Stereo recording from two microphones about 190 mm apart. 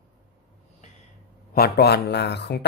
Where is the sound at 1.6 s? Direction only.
55° left (ahead or behind).